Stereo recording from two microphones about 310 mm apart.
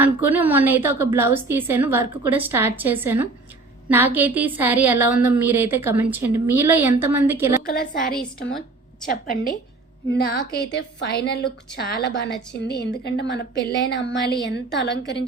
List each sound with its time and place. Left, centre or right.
0.0 s a woman's voice: centre
7.8 s a woman's voice: left